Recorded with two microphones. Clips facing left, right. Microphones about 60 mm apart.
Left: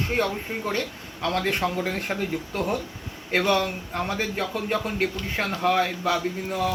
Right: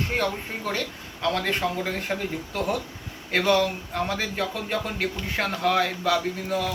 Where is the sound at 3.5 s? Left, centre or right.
Left; by 5.5 s centre.